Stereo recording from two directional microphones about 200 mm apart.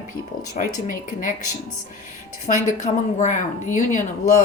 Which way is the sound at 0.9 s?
40° left (ahead or behind).